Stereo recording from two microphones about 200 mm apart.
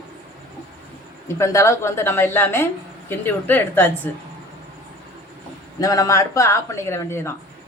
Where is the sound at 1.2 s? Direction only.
15° left (ahead or behind).